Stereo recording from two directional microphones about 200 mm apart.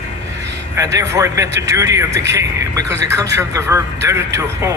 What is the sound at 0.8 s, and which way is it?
Speech, 15° right (ahead or behind).